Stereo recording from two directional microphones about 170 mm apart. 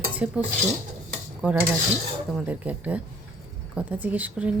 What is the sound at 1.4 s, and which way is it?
Cutlery, 10° right (ahead or behind).